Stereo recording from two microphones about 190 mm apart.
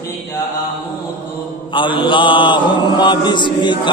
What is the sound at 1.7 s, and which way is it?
Chant, 25° left (ahead or behind).